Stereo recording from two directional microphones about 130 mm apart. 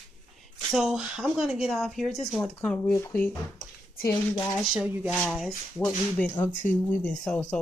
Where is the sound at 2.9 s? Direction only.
25° left (ahead or behind).